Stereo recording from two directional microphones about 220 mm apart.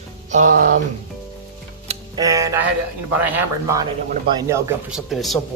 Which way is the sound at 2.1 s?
15° right (ahead or behind).